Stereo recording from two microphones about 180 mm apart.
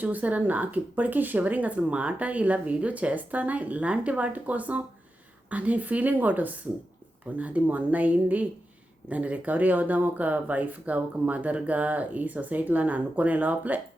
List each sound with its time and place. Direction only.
0.0 s speech: 10° right (ahead or behind)